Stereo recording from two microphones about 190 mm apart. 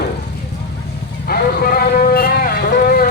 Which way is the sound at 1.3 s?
55° left (ahead or behind).